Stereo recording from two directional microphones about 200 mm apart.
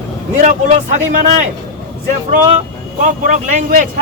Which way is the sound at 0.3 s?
35° right (ahead or behind).